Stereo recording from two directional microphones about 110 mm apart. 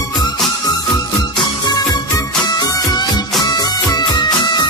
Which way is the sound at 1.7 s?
35° left (ahead or behind).